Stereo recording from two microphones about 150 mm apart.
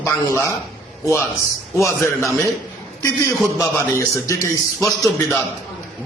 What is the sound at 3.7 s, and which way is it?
A man's voice, 15° left (ahead or behind).